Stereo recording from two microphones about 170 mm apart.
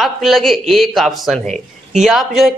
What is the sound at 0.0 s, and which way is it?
A man's voice, centre (ahead or behind).